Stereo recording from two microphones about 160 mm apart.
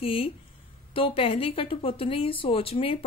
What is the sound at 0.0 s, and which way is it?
Speech, 35° left (ahead or behind).